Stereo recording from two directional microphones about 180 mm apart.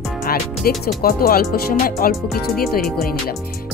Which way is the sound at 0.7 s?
55° left (ahead or behind).